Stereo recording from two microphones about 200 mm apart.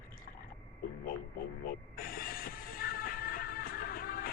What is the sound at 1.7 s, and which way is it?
Music, 45° left (ahead or behind).